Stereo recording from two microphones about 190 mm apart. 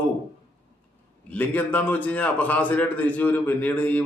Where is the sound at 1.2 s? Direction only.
10° left (ahead or behind).